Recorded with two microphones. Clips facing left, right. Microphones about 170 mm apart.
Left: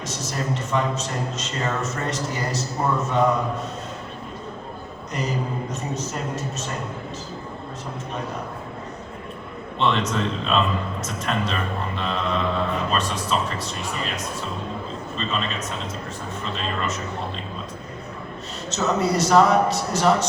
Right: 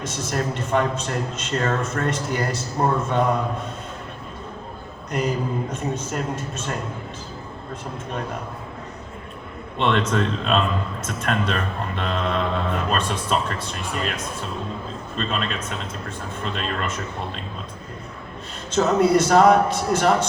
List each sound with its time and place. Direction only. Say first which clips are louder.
0.0 s a man's voice: right 3 dB; 55° right (ahead or behind)
5.7 s a man's voice: right 2 dB; 55° right (ahead or behind)
9.7 s a man's voice: right 2 dB; 55° right (ahead or behind)
15.2 s a man's voice: right 2 dB; 55° right (ahead or behind)
16.6 s a man's voice: left 1 dB; 55° right (ahead or behind)
18.7 s a man's voice: right 5 dB; 55° right (ahead or behind)